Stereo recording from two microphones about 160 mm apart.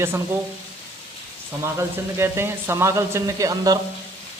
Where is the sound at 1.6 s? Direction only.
15° right (ahead or behind).